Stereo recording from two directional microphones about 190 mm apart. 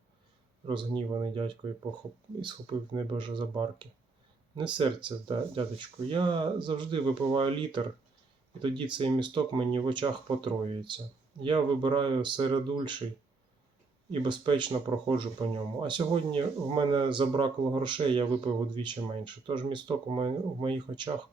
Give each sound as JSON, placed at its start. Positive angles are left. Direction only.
{"t": 0.7, "sound": "speech", "side_deg": -25}
{"t": 14.1, "sound": "speech", "side_deg": -25}